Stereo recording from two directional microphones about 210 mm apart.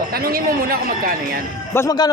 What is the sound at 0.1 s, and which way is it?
Speech, 45° right (ahead or behind).